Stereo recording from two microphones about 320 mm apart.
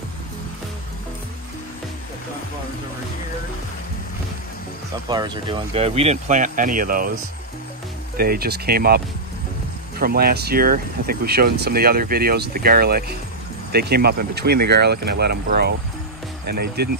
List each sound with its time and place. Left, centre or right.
5.1 s speech: centre
8.2 s speech: right